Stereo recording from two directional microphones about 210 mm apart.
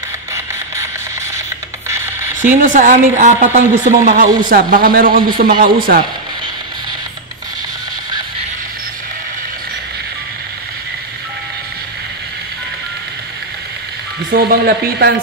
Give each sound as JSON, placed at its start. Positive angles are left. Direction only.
{"t": 1.9, "sound": "music", "side_deg": -10}
{"t": 2.4, "sound": "a woman's voice", "side_deg": -35}
{"t": 14.3, "sound": "speech", "side_deg": -45}